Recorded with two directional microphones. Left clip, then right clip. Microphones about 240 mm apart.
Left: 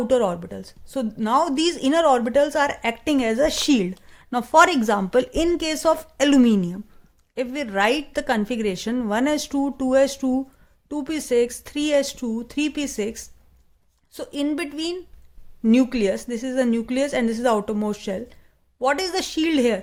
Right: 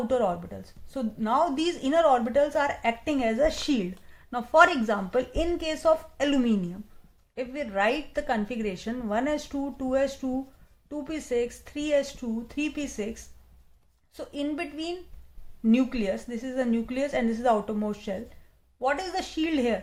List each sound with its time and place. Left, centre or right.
0.1 s a woman's voice: left